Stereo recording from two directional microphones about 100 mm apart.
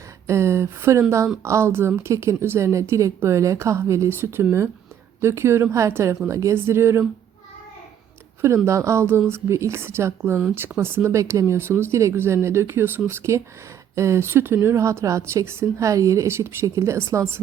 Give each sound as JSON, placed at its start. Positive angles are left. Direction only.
{"t": 0.3, "sound": "a woman's voice", "side_deg": -30}
{"t": 8.4, "sound": "a woman's voice", "side_deg": -25}